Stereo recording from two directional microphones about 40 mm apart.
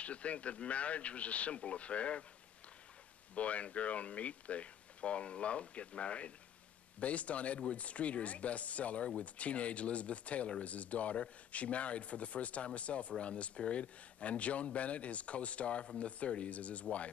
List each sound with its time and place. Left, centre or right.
0.0 s speech: left
3.3 s speech: left